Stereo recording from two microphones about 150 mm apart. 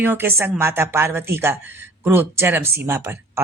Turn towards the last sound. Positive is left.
turn(degrees=-15)  # may be behind; listen again after turning